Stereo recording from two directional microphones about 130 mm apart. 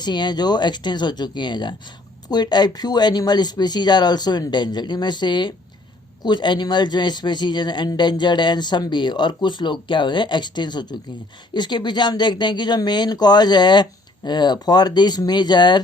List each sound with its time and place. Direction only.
0.0 s a man's voice: 35° left (ahead or behind)